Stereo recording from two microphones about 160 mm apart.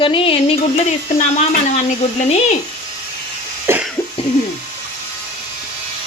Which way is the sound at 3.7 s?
15° right (ahead or behind).